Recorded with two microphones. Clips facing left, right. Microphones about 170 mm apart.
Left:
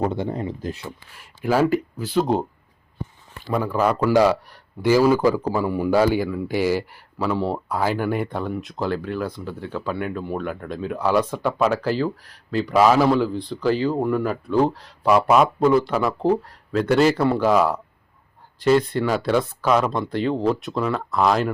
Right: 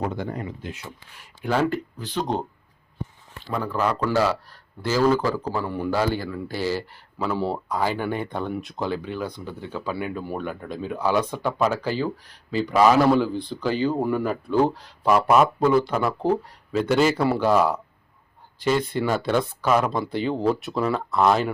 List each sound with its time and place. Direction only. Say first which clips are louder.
0.0 s speech: left 4 dB; 25° left (ahead or behind)
1.1 s speech: left 4 dB; centre (ahead or behind)
3.4 s speech: left 4 dB; 10° left (ahead or behind)
7.3 s speech: left 2 dB; centre (ahead or behind)